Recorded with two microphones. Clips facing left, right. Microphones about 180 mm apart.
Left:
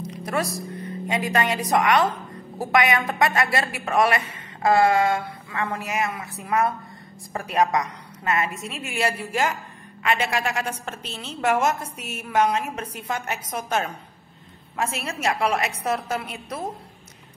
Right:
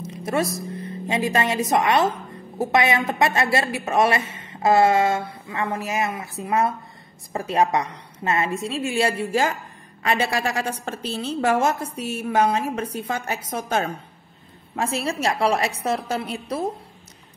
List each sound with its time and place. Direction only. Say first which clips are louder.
0.0 s a woman's voice: right 3 dB; 25° right (ahead or behind)